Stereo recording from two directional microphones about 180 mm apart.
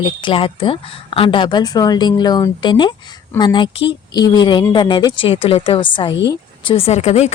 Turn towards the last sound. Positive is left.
turn(degrees=40)  # may be behind; listen again after turning